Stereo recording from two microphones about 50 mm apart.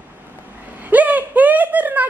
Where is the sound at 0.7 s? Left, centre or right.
Right.